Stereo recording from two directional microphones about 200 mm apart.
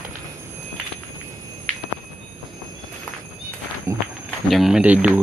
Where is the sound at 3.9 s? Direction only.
15° right (ahead or behind).